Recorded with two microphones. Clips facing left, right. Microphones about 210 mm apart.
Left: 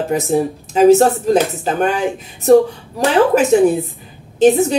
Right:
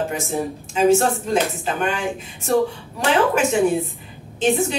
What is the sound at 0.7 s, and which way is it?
A woman's voice, 40° left (ahead or behind).